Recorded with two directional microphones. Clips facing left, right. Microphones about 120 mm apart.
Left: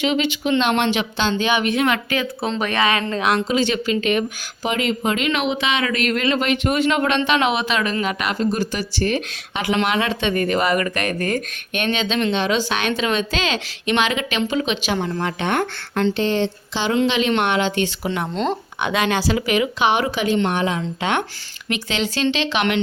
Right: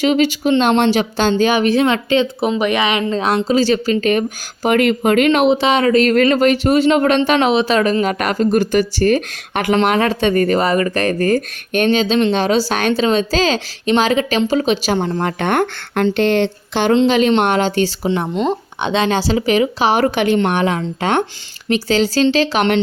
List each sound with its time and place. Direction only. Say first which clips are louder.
0.0 s speech: right 6 dB; 40° right (ahead or behind)
2.4 s speech: right 4 dB; 15° right (ahead or behind)
3.2 s speech: right 5 dB; 30° right (ahead or behind)
15.2 s speech: right 5 dB; 50° right (ahead or behind)
17.1 s speech: right 6 dB; 40° right (ahead or behind)
20.1 s speech: right 5 dB; 60° right (ahead or behind)
21.0 s speech: right 6 dB; 40° right (ahead or behind)